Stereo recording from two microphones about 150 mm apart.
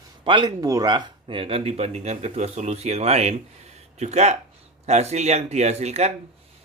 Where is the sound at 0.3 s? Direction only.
30° right (ahead or behind).